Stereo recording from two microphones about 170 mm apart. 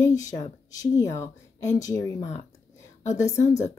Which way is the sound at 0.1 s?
20° left (ahead or behind).